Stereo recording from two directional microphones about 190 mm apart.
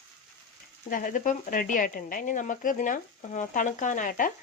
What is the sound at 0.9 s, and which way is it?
Speech, 45° left (ahead or behind).